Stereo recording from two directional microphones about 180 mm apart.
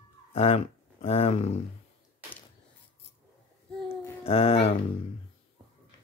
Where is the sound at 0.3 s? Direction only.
35° left (ahead or behind).